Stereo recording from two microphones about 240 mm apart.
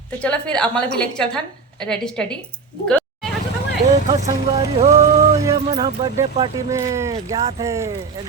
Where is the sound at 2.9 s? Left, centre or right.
Centre.